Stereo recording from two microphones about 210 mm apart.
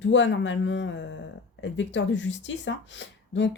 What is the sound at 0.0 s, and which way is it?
Speech, 60° left (ahead or behind).